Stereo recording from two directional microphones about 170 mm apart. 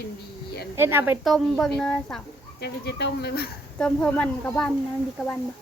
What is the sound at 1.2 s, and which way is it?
Speech, centre (ahead or behind).